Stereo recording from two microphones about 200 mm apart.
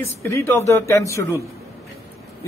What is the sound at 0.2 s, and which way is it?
Speech, 15° left (ahead or behind).